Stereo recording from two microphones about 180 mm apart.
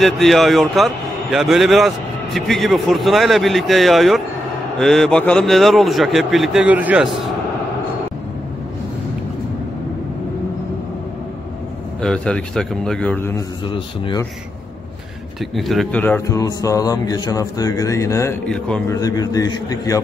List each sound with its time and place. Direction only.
0.0 s a man's voice: centre (ahead or behind)
12.0 s a man's voice: 5° left (ahead or behind)
13.7 s mantra: 30° left (ahead or behind)
15.5 s a man's voice: centre (ahead or behind)
16.3 s mantra: 20° left (ahead or behind)